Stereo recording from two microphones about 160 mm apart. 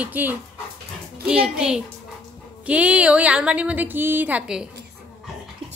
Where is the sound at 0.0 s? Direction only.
10° right (ahead or behind).